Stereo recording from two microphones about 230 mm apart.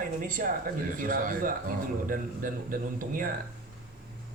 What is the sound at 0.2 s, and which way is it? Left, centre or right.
Speech, right.